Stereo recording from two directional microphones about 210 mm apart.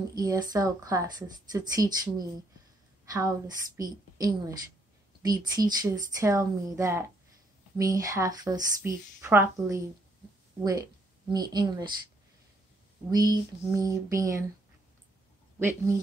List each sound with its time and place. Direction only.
0.1 s a woman's voice: 20° right (ahead or behind)
13.1 s speech: 15° right (ahead or behind)